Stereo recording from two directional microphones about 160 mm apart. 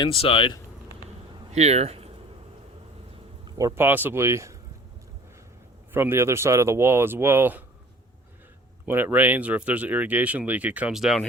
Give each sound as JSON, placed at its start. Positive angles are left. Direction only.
{"t": 0.0, "sound": "speech", "side_deg": 35}
{"t": 1.5, "sound": "speech", "side_deg": -40}
{"t": 3.6, "sound": "speech", "side_deg": -15}
{"t": 5.9, "sound": "speech", "side_deg": -15}
{"t": 8.9, "sound": "speech", "side_deg": -10}